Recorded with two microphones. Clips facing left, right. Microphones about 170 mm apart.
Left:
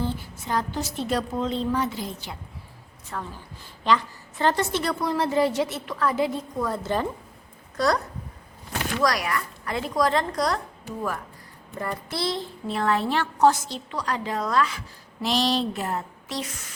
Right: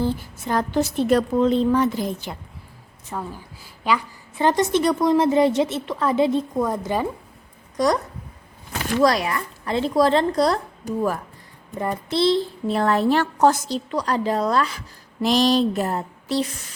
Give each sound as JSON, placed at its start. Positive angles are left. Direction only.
{"t": 0.0, "sound": "a woman's voice", "side_deg": -50}
{"t": 3.1, "sound": "a woman's voice", "side_deg": -10}
{"t": 11.7, "sound": "a woman's voice", "side_deg": -20}
{"t": 12.6, "sound": "a woman's voice", "side_deg": -40}